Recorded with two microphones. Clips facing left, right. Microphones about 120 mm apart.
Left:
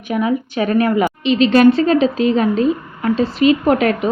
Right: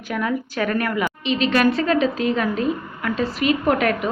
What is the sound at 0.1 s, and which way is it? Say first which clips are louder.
A woman's voice: left 6 dB; 20° left (ahead or behind).